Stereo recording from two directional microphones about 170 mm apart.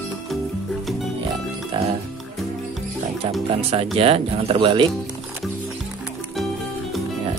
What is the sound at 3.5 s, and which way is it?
Speech, 35° right (ahead or behind).